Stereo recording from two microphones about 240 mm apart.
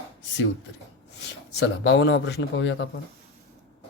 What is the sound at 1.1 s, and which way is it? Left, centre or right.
Speech, left.